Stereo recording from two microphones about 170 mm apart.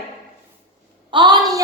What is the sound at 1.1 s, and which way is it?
Speech, 25° right (ahead or behind).